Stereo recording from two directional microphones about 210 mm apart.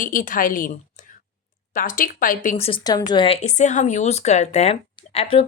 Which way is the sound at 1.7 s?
40° left (ahead or behind).